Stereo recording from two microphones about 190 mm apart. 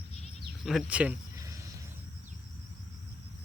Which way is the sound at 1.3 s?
15° right (ahead or behind).